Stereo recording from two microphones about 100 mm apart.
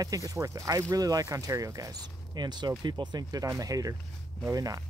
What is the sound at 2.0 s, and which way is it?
Speech, 45° right (ahead or behind).